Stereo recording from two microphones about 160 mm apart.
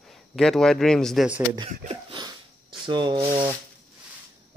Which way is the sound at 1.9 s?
30° right (ahead or behind).